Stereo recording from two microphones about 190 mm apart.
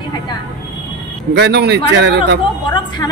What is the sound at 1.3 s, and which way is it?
Speech, 60° right (ahead or behind).